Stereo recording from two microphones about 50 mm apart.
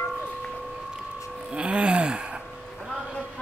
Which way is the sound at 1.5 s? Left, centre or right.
Right.